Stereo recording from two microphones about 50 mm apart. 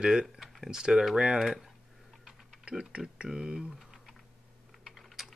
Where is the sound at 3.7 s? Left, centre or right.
Centre.